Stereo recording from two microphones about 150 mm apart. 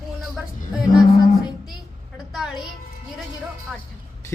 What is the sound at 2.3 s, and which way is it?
Music, 5° right (ahead or behind).